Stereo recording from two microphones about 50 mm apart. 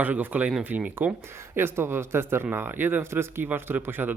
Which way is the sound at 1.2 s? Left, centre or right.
Right.